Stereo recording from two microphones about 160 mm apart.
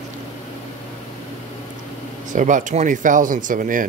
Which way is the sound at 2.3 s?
50° right (ahead or behind).